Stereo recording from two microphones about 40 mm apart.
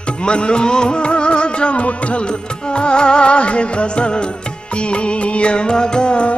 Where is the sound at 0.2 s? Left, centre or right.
Left.